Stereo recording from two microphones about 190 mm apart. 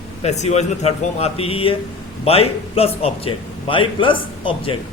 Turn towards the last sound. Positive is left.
turn(degrees=25)  # may be behind; listen again after turning